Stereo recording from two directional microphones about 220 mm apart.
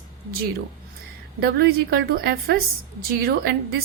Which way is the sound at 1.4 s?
45° right (ahead or behind).